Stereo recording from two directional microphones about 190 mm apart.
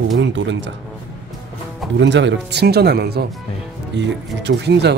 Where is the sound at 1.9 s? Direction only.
70° right (ahead or behind).